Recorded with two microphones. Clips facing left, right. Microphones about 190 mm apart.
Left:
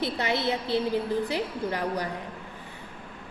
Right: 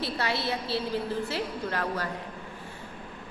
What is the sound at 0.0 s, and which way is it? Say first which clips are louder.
A woman's voice: left 3 dB; 20° left (ahead or behind).